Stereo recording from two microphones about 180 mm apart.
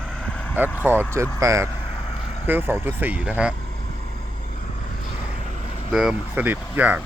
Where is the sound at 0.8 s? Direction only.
10° right (ahead or behind).